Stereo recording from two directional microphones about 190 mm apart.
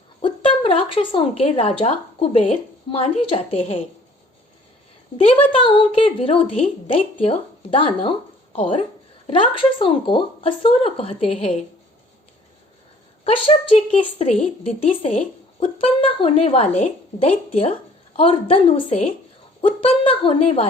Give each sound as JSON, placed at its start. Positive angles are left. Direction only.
{"t": 0.2, "sound": "a woman's voice", "side_deg": 30}
{"t": 5.1, "sound": "a woman's voice", "side_deg": 30}
{"t": 13.2, "sound": "a woman's voice", "side_deg": 30}